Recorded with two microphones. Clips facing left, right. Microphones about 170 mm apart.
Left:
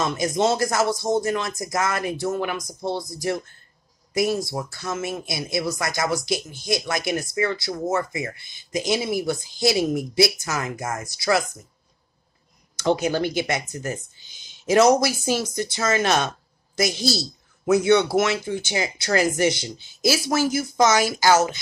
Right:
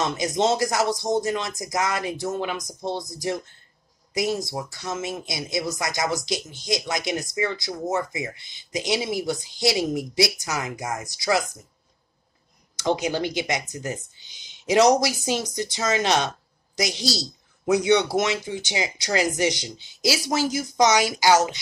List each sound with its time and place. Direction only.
0.0 s a man's voice: 20° right (ahead or behind)
12.7 s a man's voice: 15° right (ahead or behind)